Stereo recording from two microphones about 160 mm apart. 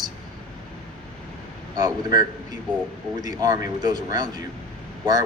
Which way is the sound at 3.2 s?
25° right (ahead or behind).